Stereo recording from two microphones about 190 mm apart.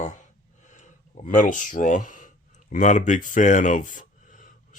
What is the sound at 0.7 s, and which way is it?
Speech, 40° left (ahead or behind).